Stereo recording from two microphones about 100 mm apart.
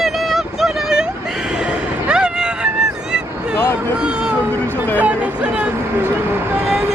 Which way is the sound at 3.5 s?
20° left (ahead or behind).